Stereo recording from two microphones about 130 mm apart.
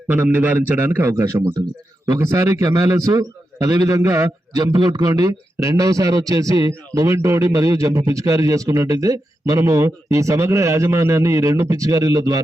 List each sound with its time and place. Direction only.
0.1 s a man's voice: 15° right (ahead or behind)